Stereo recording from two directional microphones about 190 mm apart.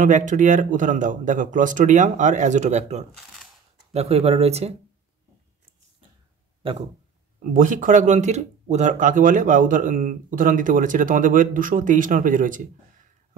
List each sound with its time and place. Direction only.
0.0 s speech: 40° right (ahead or behind)
7.5 s speech: 45° right (ahead or behind)